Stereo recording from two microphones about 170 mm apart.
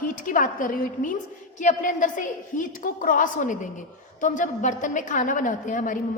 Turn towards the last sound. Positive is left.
turn(degrees=50)  # may be behind; listen again after turning